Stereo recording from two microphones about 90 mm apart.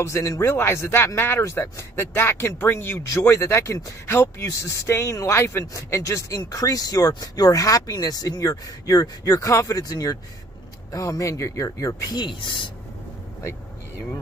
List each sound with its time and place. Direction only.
0.0 s speech: 30° left (ahead or behind)
12.2 s speech: 60° left (ahead or behind)